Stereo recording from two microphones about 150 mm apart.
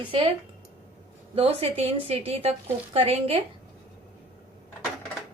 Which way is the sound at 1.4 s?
40° right (ahead or behind).